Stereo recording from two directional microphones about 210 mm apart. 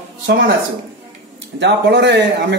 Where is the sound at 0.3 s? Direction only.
55° right (ahead or behind).